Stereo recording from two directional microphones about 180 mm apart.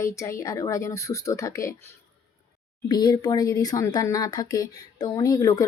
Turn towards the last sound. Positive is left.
turn(degrees=20)  # may be behind; listen again after turning